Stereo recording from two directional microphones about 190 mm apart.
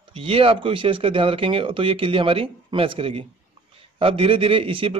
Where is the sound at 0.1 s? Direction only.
30° right (ahead or behind).